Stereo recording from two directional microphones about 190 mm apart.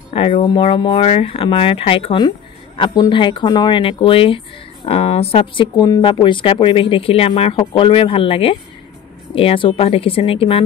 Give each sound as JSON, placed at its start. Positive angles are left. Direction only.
{"t": 0.1, "sound": "speech", "side_deg": 30}